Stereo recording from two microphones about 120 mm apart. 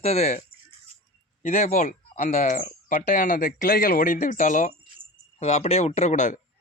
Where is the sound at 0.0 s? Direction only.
60° left (ahead or behind).